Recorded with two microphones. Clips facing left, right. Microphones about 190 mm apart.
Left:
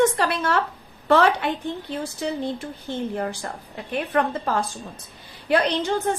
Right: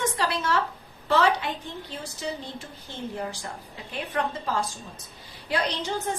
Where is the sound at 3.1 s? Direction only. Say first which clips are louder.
Left 5 dB; 55° left (ahead or behind).